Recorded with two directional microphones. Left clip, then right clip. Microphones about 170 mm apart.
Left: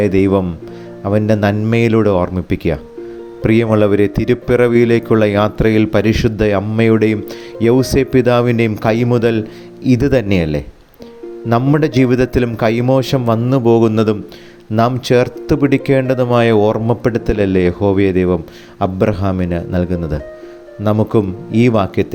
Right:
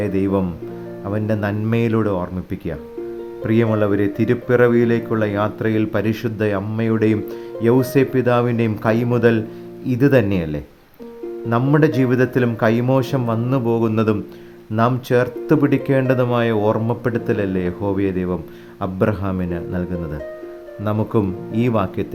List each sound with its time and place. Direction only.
0.0 s speech: 20° left (ahead or behind)
11.7 s speech: 20° left (ahead or behind)